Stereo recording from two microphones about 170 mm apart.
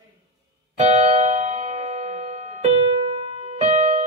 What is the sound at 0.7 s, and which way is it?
Music, 40° right (ahead or behind).